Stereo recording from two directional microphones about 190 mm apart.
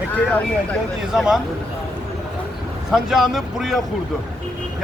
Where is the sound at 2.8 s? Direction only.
Centre (ahead or behind).